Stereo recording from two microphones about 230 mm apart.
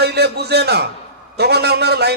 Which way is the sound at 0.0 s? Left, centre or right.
Right.